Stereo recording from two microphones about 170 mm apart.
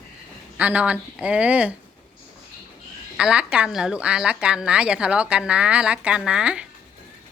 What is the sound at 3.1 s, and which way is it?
Speech, 5° right (ahead or behind).